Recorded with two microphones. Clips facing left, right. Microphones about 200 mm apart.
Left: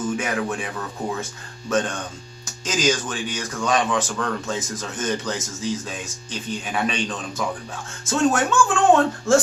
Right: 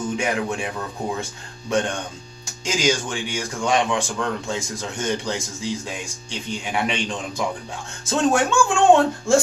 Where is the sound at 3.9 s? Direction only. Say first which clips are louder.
Even; 15° right (ahead or behind).